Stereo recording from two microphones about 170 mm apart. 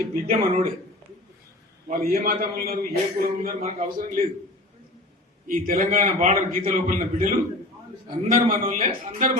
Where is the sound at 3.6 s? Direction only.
40° right (ahead or behind).